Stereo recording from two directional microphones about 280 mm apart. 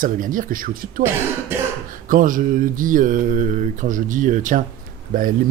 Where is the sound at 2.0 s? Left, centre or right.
Right.